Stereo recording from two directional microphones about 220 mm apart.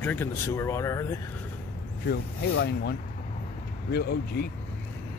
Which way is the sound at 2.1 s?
50° left (ahead or behind).